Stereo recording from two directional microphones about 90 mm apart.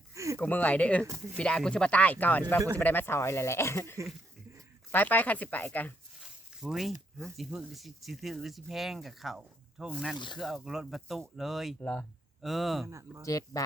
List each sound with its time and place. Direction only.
0.1 s a sound: 35° right (ahead or behind)
0.3 s speech: 15° left (ahead or behind)
6.6 s speech: 5° right (ahead or behind)
11.8 s speech: 20° left (ahead or behind)
12.4 s speech: centre (ahead or behind)
12.9 s speech: 35° right (ahead or behind)
13.2 s speech: 40° left (ahead or behind)